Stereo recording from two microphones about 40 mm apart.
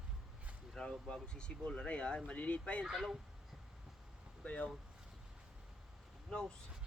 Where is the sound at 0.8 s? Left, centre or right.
Centre; by 2.6 s left.